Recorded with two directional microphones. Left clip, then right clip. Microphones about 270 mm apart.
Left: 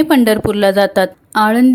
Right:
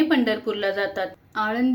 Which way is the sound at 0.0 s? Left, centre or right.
Left.